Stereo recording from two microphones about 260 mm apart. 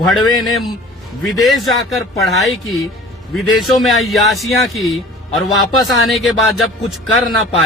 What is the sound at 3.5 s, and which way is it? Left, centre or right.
Speech, centre.